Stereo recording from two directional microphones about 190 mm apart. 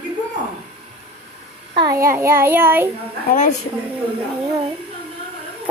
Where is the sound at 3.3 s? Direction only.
40° left (ahead or behind).